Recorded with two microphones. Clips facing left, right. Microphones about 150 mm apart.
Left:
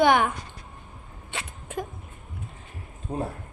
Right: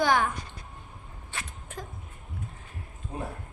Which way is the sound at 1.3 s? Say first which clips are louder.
Left 6 dB; 20° left (ahead or behind).